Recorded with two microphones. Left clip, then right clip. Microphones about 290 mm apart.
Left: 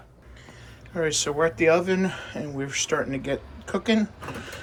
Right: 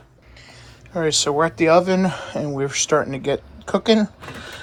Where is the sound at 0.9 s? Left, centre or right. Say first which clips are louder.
Right 6 dB; centre.